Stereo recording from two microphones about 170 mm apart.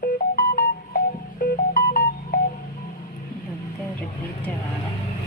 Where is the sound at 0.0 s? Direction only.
60° left (ahead or behind).